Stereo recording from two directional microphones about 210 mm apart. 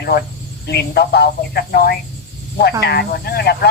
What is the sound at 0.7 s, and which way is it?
Speech, 50° left (ahead or behind).